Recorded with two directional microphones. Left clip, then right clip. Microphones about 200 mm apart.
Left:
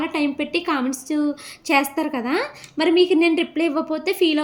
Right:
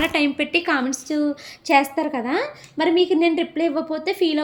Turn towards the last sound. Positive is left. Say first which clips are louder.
# left 1 dB
turn(degrees=10)  # may be behind; listen again after turning